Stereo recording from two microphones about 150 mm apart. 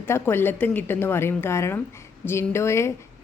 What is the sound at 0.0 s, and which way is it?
Speech, 15° left (ahead or behind).